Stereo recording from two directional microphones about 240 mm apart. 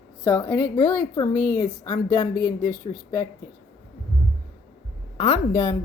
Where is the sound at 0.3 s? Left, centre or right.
Centre.